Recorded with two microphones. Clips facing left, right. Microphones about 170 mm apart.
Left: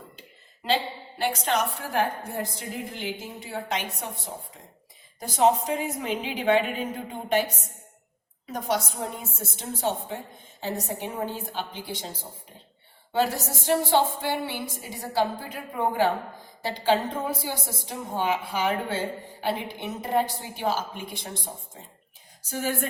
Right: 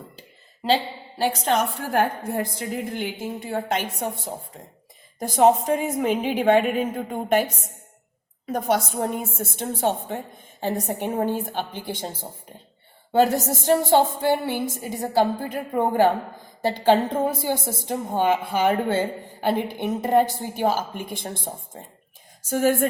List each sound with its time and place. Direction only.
1.2 s a woman's voice: 45° right (ahead or behind)
5.2 s a woman's voice: 50° right (ahead or behind)
8.4 s a woman's voice: 55° right (ahead or behind)
13.1 s a woman's voice: 50° right (ahead or behind)
22.4 s a woman's voice: 50° right (ahead or behind)